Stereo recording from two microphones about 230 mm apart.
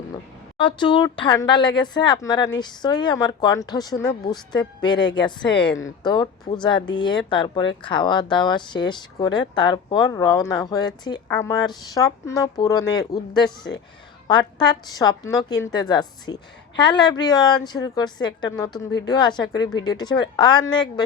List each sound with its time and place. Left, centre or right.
0.6 s a woman's voice: centre